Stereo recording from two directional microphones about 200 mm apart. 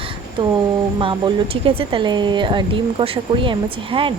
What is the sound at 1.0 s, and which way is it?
Speech, 25° right (ahead or behind).